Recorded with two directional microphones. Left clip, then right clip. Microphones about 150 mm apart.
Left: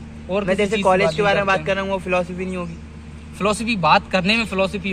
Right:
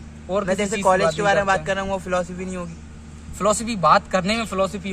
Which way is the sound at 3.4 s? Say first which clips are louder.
Even; 35° right (ahead or behind).